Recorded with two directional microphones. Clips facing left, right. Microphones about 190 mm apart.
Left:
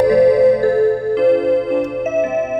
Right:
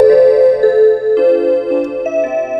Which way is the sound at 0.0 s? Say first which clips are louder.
Right 4 dB; 45° right (ahead or behind).